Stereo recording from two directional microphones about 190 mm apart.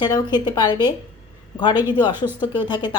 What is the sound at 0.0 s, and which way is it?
Speech, 20° left (ahead or behind).